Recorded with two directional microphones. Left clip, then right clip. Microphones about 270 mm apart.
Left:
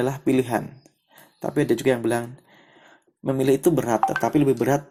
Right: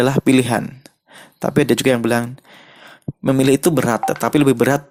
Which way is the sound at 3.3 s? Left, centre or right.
Right.